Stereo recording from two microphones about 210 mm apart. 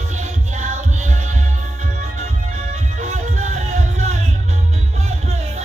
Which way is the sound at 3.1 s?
35° right (ahead or behind).